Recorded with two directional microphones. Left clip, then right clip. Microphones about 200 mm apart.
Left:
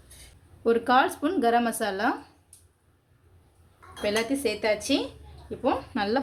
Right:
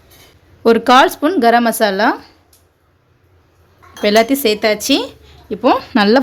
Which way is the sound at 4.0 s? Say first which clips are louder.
Right 14 dB; 55° right (ahead or behind).